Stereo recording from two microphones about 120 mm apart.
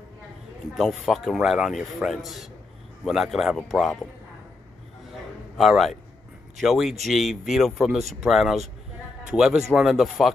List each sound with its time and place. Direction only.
0.7 s a man's voice: centre (ahead or behind)
5.6 s a man's voice: centre (ahead or behind)